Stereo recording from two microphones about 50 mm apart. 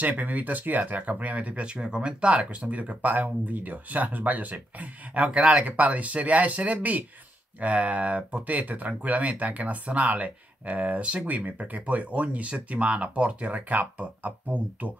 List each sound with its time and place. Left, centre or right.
0.0 s speech: right